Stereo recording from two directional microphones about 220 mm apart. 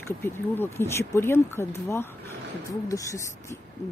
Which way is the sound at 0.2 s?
10° left (ahead or behind).